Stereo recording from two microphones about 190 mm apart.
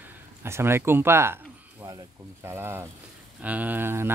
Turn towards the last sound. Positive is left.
turn(degrees=-10)  # may be behind; listen again after turning